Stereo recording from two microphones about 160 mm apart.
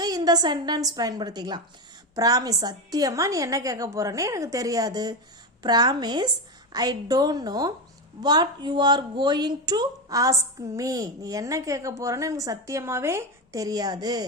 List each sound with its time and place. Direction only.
0.0 s a woman's voice: 25° right (ahead or behind)